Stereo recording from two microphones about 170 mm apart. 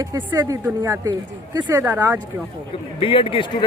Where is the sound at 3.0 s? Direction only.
30° left (ahead or behind).